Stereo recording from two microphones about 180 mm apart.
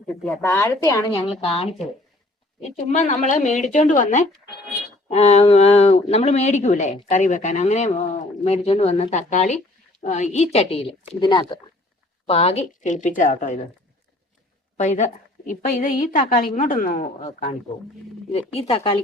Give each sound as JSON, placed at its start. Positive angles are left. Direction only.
{"t": 0.3, "sound": "speech", "side_deg": 15}
{"t": 1.1, "sound": "a woman's voice", "side_deg": 30}
{"t": 14.8, "sound": "a woman's voice", "side_deg": 40}